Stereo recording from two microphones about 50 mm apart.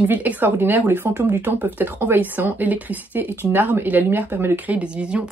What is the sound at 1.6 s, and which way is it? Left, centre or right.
Speech, right.